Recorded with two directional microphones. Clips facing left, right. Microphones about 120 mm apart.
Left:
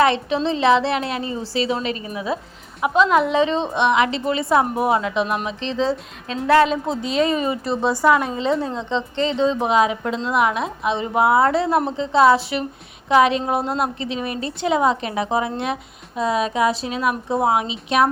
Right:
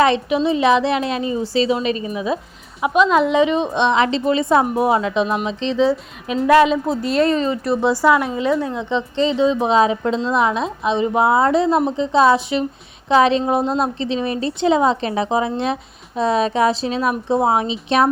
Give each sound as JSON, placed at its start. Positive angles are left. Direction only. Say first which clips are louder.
{"t": 0.0, "sound": "a woman's voice", "louder": "right 2 dB", "side_deg": -15}
{"t": 3.8, "sound": "a woman's voice", "louder": "right 1 dB", "side_deg": -25}
{"t": 6.7, "sound": "speech", "louder": "right 4 dB", "side_deg": 0}
{"t": 7.8, "sound": "a woman's voice", "louder": "right 1 dB", "side_deg": -15}